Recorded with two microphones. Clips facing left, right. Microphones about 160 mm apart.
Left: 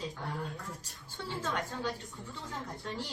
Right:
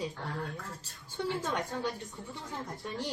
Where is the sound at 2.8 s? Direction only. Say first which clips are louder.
Right 5 dB; 15° right (ahead or behind).